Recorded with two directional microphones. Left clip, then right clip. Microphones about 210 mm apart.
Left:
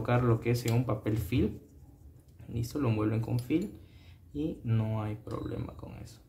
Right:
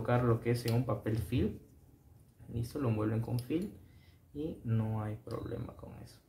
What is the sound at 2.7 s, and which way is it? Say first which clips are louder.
Speech: left 4 dB; 20° left (ahead or behind).